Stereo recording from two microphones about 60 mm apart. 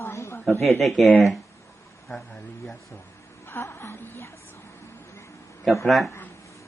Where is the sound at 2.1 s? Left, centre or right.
Centre.